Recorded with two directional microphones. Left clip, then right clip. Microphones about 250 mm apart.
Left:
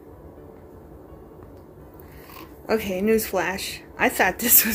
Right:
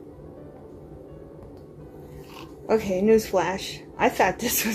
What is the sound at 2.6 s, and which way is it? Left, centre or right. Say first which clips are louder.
A woman's voice: right 1 dB; centre.